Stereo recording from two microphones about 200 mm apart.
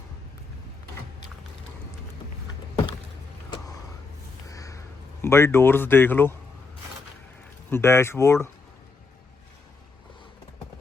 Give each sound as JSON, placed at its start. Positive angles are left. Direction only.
{"t": 4.4, "sound": "a sound", "side_deg": 15}
{"t": 5.2, "sound": "speech", "side_deg": 10}
{"t": 7.7, "sound": "speech", "side_deg": 15}